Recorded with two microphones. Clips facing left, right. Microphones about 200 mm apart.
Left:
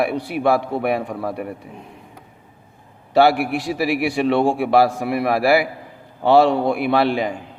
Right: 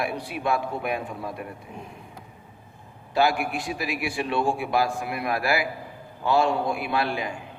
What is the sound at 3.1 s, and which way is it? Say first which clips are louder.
A man's voice: left 8 dB; 70° left (ahead or behind).